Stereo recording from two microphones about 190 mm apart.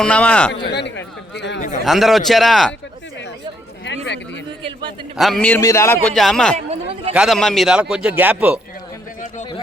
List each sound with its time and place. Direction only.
0.0 s a man's voice: 5° left (ahead or behind)
0.6 s speech: 65° left (ahead or behind)
1.8 s a man's voice: centre (ahead or behind)
3.8 s a sound: 65° left (ahead or behind)
5.1 s a man's voice: centre (ahead or behind)